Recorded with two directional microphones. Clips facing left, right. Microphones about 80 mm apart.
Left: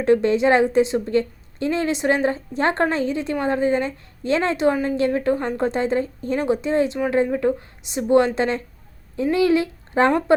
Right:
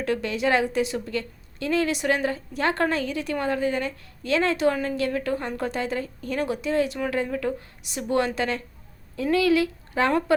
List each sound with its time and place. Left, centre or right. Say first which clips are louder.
0.0 s a woman's voice: left 8 dB; left